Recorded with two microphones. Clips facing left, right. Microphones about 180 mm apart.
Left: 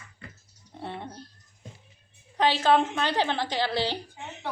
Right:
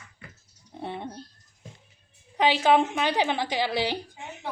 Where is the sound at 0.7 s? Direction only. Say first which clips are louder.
Right 2 dB; 15° right (ahead or behind).